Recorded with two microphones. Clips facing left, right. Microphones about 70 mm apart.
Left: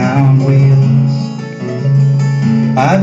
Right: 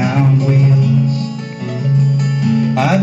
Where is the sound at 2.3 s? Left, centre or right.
Centre.